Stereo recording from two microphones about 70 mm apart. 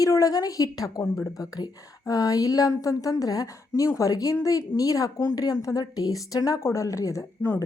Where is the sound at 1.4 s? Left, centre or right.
Left.